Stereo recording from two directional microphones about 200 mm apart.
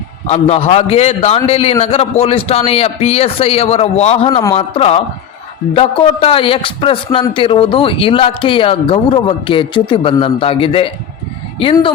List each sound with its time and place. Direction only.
0.3 s a man's voice: 30° left (ahead or behind)